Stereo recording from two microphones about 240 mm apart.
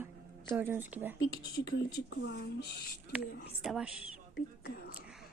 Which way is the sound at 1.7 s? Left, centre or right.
Left.